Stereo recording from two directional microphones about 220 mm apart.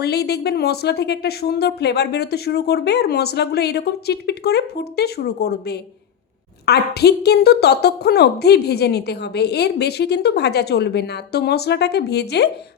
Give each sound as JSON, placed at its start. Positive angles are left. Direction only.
{"t": 0.0, "sound": "speech", "side_deg": 45}